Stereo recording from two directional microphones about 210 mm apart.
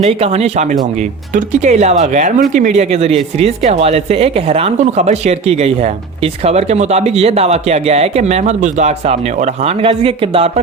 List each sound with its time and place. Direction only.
0.0 s a woman's voice: 30° right (ahead or behind)